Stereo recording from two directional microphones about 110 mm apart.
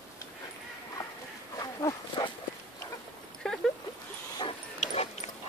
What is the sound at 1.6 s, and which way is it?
Livestock, 35° left (ahead or behind).